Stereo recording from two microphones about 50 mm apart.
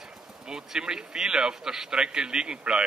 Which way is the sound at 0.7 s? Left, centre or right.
Centre.